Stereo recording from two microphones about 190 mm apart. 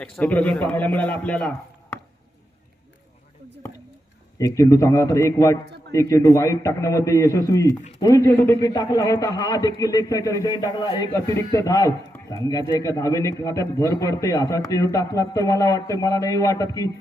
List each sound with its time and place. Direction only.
0.0 s speech: 5° left (ahead or behind)
4.4 s speech: 15° left (ahead or behind)